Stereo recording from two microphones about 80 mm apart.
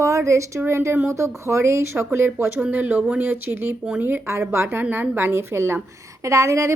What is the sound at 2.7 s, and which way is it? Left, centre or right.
A woman's voice, right.